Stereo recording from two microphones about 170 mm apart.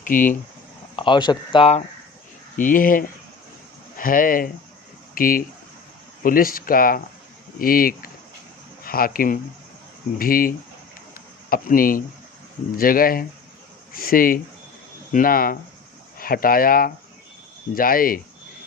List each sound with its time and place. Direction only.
0.1 s speech: 50° left (ahead or behind)
0.9 s speech: 30° left (ahead or behind)
2.6 s speech: 55° left (ahead or behind)
11.1 s a sound: 60° left (ahead or behind)
12.7 s speech: 55° left (ahead or behind)